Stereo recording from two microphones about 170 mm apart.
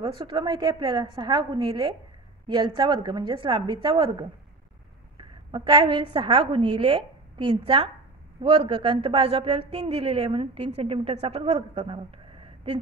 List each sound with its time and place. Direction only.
0.0 s a woman's voice: 25° right (ahead or behind)
5.1 s a sound: 30° right (ahead or behind)
6.1 s speech: 30° right (ahead or behind)